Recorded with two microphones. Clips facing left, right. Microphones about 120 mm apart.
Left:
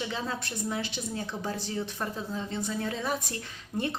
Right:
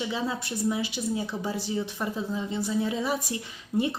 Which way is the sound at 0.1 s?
10° right (ahead or behind).